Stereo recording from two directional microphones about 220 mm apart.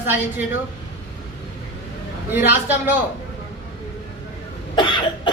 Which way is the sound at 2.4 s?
10° right (ahead or behind).